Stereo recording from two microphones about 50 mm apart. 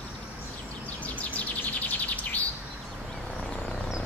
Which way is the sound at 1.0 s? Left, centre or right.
Left.